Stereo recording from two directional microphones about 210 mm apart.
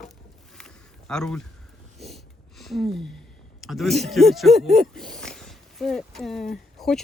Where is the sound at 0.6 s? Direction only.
5° left (ahead or behind).